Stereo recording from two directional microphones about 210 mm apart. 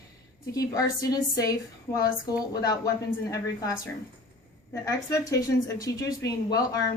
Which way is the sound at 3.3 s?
15° left (ahead or behind).